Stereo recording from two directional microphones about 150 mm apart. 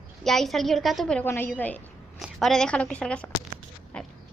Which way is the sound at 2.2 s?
Centre (ahead or behind).